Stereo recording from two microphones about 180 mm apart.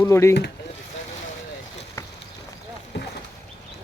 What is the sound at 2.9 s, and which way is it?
Boat, 70° left (ahead or behind).